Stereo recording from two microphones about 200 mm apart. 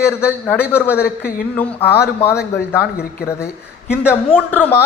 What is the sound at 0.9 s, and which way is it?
Speech, 50° left (ahead or behind).